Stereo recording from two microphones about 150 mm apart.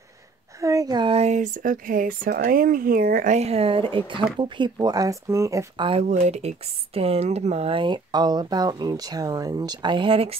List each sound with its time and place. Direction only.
0.6 s a sound: 20° right (ahead or behind)
1.1 s speech: 50° right (ahead or behind); by 3.3 s 70° right (ahead or behind)
3.3 s speech: 45° right (ahead or behind); by 5.9 s 20° right (ahead or behind)
5.9 s speech: 45° right (ahead or behind)